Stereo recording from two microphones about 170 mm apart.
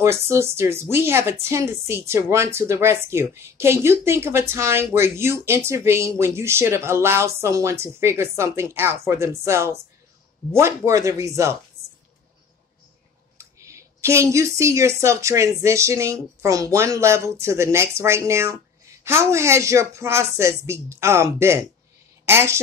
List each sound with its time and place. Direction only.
0.0 s a woman's voice: 15° right (ahead or behind)
13.4 s a woman's voice: 20° right (ahead or behind)